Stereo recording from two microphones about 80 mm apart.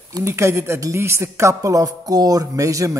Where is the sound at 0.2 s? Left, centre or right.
Right.